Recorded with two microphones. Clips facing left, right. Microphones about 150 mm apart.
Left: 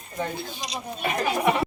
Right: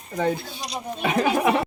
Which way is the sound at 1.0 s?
90° right.